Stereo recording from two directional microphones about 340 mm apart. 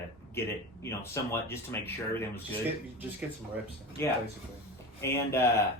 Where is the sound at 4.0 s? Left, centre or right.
Centre.